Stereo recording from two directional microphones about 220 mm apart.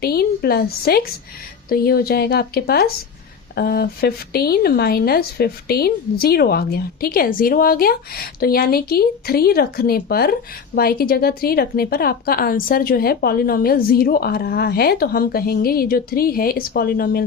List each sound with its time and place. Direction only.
0.0 s a woman's voice: 45° left (ahead or behind)